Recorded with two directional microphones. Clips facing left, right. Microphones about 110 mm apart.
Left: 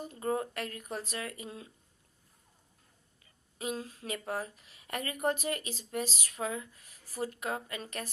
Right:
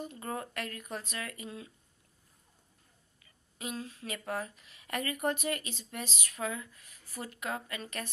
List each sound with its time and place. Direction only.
0.0 s speech: 30° left (ahead or behind)
3.5 s speech: 35° left (ahead or behind)